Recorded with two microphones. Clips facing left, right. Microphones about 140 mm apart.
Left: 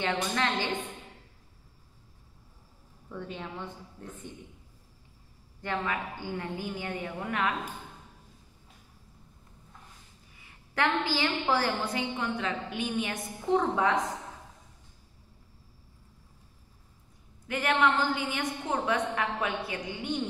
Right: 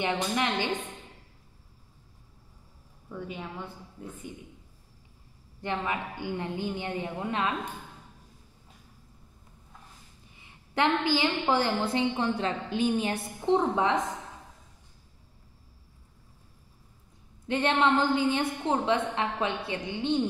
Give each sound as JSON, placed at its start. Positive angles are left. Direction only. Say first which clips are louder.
{"t": 0.0, "sound": "a woman's voice", "louder": "right 1 dB", "side_deg": -15}
{"t": 3.1, "sound": "a woman's voice", "louder": "right 1 dB", "side_deg": -5}
{"t": 5.6, "sound": "a woman's voice", "louder": "right 1 dB", "side_deg": -20}
{"t": 10.3, "sound": "a woman's voice", "louder": "right 4 dB", "side_deg": -25}
{"t": 17.5, "sound": "a woman's voice", "louder": "right 2 dB", "side_deg": -25}